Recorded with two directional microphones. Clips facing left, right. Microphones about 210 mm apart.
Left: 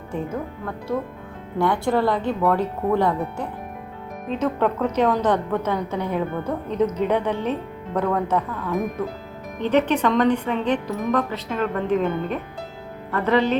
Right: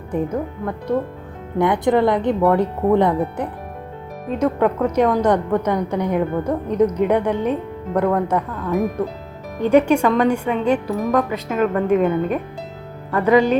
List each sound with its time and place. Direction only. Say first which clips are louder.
0.9 s a woman's voice: right 4 dB; 15° right (ahead or behind)